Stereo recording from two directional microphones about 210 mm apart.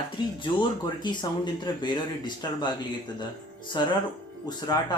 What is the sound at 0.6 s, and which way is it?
Speech, 20° left (ahead or behind).